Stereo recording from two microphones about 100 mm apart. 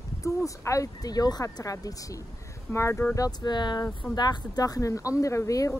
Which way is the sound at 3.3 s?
45° left (ahead or behind).